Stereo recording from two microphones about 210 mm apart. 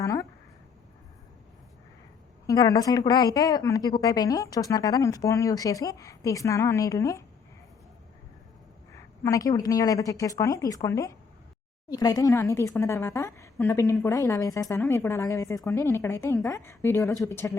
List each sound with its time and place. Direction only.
0.0 s a sound: 15° left (ahead or behind)
2.5 s a woman's voice: 15° left (ahead or behind)
9.2 s a woman's voice: 15° left (ahead or behind)